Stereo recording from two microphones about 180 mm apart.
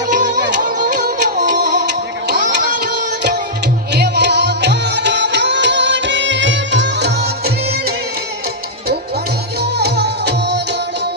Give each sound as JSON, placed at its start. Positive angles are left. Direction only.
{"t": 0.1, "sound": "music", "side_deg": -45}
{"t": 3.9, "sound": "music", "side_deg": -65}
{"t": 9.6, "sound": "music", "side_deg": -65}